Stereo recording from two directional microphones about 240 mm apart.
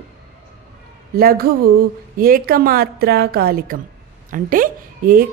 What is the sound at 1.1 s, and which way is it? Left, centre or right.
Speech, right.